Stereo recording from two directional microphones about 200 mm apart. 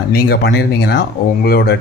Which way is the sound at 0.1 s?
55° left (ahead or behind).